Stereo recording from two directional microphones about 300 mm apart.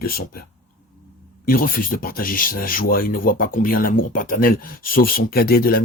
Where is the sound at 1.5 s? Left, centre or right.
Left.